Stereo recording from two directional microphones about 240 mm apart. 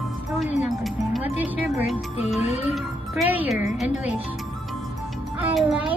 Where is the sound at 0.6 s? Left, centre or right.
Centre.